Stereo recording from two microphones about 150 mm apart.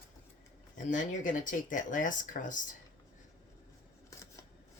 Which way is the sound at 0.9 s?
60° left (ahead or behind).